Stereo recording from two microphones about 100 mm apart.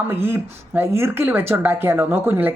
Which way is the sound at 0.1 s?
20° right (ahead or behind).